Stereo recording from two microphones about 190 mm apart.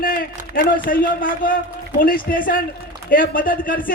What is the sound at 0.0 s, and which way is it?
A man's voice, 50° left (ahead or behind).